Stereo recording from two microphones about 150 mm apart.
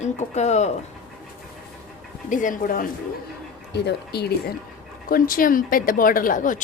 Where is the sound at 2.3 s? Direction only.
60° left (ahead or behind).